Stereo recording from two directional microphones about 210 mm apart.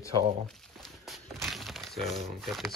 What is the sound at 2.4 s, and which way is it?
Speech, centre (ahead or behind).